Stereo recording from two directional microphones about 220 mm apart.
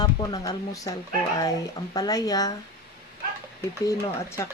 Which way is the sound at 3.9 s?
15° left (ahead or behind).